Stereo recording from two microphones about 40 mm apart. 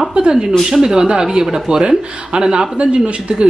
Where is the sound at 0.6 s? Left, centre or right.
Centre.